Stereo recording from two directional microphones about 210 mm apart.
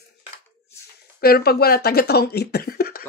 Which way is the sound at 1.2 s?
50° left (ahead or behind).